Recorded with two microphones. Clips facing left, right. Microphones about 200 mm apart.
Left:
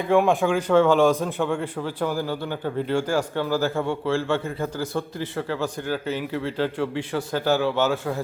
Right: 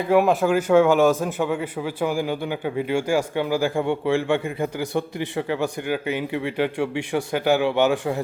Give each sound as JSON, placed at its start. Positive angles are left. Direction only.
{"t": 0.1, "sound": "speech", "side_deg": -5}